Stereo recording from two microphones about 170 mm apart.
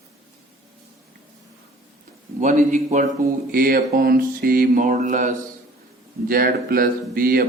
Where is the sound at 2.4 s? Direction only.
45° right (ahead or behind).